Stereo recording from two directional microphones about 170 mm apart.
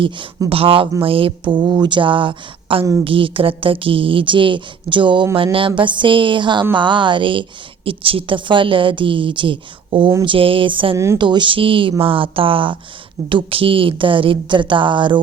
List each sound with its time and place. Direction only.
0.0 s a woman's voice: 25° right (ahead or behind)
10.9 s speech: 15° right (ahead or behind)
11.2 s a woman's voice: 25° right (ahead or behind)